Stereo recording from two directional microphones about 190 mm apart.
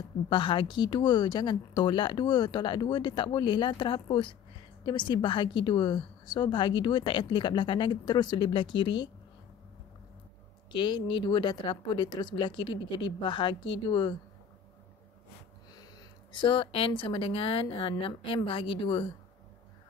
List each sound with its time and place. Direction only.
0.3 s a woman's voice: 25° left (ahead or behind)
10.7 s a woman's voice: 25° left (ahead or behind)
15.7 s a woman's voice: 20° left (ahead or behind)